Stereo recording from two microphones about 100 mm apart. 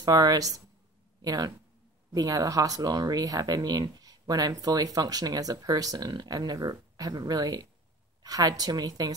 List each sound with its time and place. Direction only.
0.0 s speech: 40° right (ahead or behind)